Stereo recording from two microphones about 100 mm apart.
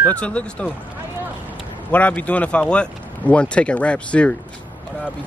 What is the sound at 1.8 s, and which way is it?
Speech, 15° left (ahead or behind).